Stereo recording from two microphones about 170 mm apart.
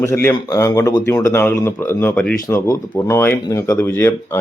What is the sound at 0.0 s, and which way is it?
Speech, 15° left (ahead or behind).